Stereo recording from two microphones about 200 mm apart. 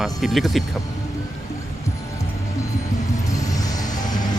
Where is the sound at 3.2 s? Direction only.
15° left (ahead or behind).